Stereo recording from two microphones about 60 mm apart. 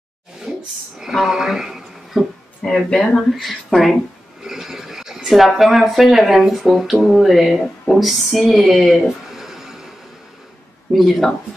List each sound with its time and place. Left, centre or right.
0.5 s a sound: centre
0.9 s a woman's voice: centre
2.6 s speech: centre
3.3 s speech: centre
10.9 s speech: centre